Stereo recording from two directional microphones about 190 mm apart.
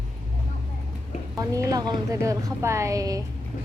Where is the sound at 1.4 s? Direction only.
15° right (ahead or behind).